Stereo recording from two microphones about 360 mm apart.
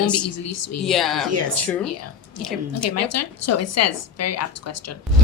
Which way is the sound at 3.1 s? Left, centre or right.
Left.